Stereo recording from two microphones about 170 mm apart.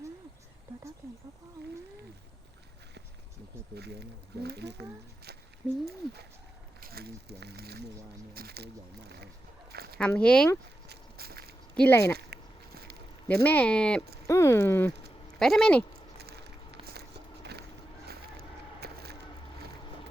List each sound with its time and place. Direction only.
3.8 s speech: 75° right (ahead or behind)
6.7 s speech: 60° right (ahead or behind)
9.7 s a sound: 65° right (ahead or behind)
10.0 s speech: 5° left (ahead or behind)
10.8 s walk: 65° right (ahead or behind)
11.8 s speech: 15° left (ahead or behind)
12.1 s a sound: 65° right (ahead or behind)
13.2 s speech: 10° left (ahead or behind)
14.3 s speech: 15° left (ahead or behind)
15.4 s speech: centre (ahead or behind)
16.1 s a sound: 70° right (ahead or behind)
16.8 s walk: 70° right (ahead or behind)
18.8 s a sound: 70° right (ahead or behind)